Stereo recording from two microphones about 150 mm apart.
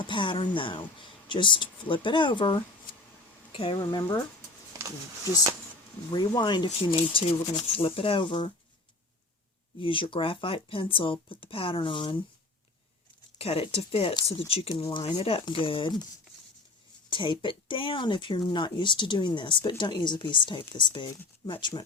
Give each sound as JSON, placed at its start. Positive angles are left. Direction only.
{"t": 0.0, "sound": "speech", "side_deg": 35}
{"t": 6.1, "sound": "speech", "side_deg": 30}
{"t": 6.7, "sound": "speech", "side_deg": 40}
{"t": 9.8, "sound": "speech", "side_deg": 35}
{"t": 13.4, "sound": "speech", "side_deg": 40}
{"t": 17.1, "sound": "speech", "side_deg": 35}